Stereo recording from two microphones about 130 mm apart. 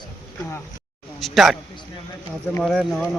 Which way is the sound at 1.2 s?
Centre (ahead or behind).